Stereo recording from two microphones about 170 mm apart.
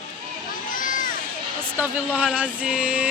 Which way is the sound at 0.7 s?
50° left (ahead or behind).